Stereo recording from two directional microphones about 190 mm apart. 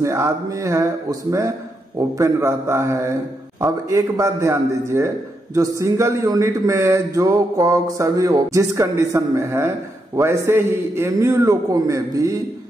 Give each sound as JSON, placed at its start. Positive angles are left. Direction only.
{"t": 0.0, "sound": "a man's voice", "side_deg": -15}
{"t": 2.0, "sound": "a man's voice", "side_deg": -15}